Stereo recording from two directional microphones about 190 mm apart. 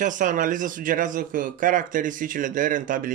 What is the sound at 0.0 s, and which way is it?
Speech, 45° right (ahead or behind).